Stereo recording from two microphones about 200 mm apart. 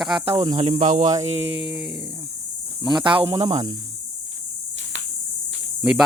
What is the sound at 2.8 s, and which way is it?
Speech, 25° right (ahead or behind).